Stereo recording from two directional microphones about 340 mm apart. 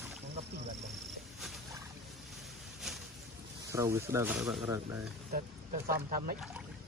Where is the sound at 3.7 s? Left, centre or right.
Centre.